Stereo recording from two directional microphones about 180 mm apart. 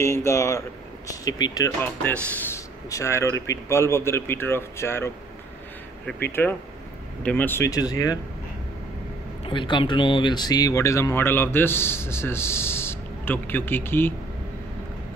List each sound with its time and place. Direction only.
0.0 s speech: 15° left (ahead or behind)
9.4 s speech: 25° left (ahead or behind); by 14.1 s 10° left (ahead or behind)